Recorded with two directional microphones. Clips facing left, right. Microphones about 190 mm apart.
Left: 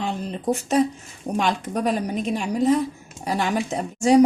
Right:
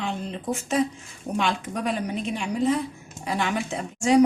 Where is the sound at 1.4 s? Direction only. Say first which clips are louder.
Left 3 dB; 40° left (ahead or behind).